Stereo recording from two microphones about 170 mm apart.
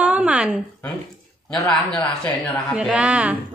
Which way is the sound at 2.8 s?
5° right (ahead or behind).